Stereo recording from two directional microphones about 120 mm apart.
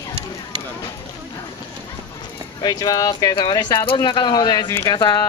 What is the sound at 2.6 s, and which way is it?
Speech, 30° left (ahead or behind).